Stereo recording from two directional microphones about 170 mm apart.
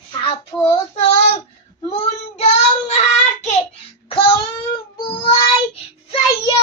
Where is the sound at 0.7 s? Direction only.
35° left (ahead or behind).